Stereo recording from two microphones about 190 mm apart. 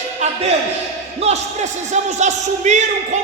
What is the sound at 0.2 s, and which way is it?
Music, 35° right (ahead or behind).